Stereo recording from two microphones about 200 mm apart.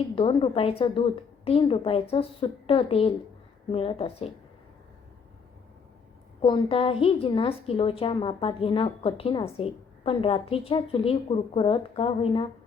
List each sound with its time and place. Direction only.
0.2 s a woman's voice: 25° left (ahead or behind)
6.4 s a woman's voice: 25° left (ahead or behind)